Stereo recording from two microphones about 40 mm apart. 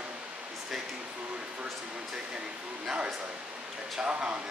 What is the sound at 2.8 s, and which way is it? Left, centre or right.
Speech, right.